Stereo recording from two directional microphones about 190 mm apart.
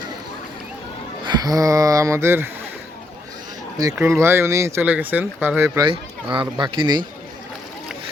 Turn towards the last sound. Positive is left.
turn(degrees=-25)  # may be behind; listen again after turning